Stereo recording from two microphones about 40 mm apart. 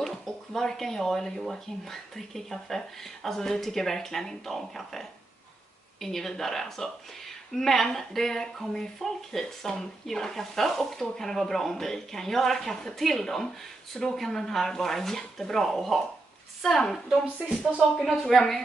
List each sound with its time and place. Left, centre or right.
0.0 s a sound: centre
1.4 s speech: centre
18.2 s speech: centre